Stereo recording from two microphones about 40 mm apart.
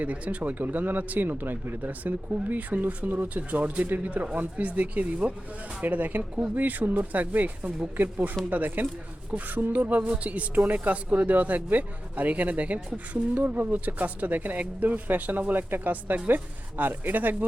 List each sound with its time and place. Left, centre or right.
0.0 s speech: right
1.9 s speech: right